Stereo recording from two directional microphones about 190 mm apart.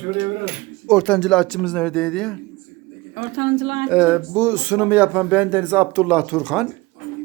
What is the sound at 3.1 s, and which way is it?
Speech, 40° right (ahead or behind).